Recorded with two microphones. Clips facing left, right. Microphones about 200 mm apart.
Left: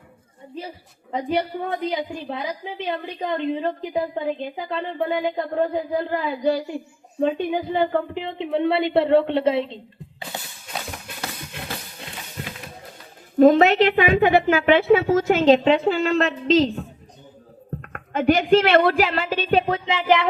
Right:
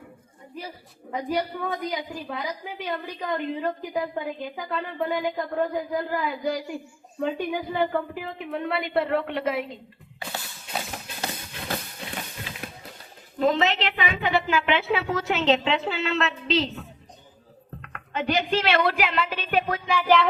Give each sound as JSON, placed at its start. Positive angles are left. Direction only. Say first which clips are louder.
{"t": 1.8, "sound": "a woman's voice", "louder": "left 5 dB", "side_deg": 25}
{"t": 10.3, "sound": "a sound", "louder": "left 1 dB", "side_deg": 20}
{"t": 13.4, "sound": "a woman's voice", "louder": "left 9 dB", "side_deg": 50}